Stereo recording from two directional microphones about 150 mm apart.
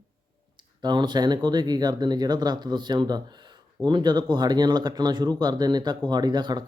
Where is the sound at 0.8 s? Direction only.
30° right (ahead or behind).